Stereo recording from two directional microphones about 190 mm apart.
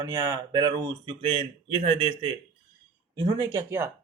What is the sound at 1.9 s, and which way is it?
Speech, 30° right (ahead or behind).